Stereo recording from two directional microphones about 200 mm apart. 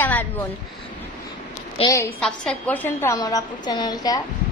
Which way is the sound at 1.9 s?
15° left (ahead or behind).